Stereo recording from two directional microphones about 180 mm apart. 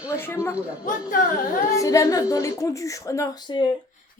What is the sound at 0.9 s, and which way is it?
Speech, 45° left (ahead or behind).